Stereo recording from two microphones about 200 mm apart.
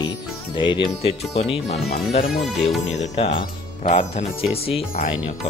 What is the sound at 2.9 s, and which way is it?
Speech, 35° left (ahead or behind).